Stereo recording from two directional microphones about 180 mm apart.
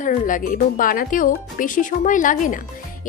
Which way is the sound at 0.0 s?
45° left (ahead or behind).